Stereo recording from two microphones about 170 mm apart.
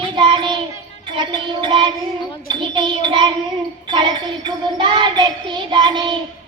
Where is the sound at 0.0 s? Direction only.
30° right (ahead or behind).